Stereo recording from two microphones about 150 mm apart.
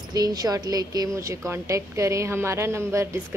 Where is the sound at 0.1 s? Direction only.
25° right (ahead or behind).